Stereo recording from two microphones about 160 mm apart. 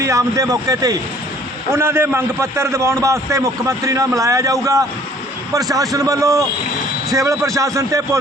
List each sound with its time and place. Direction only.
0.0 s a man's voice: 20° right (ahead or behind)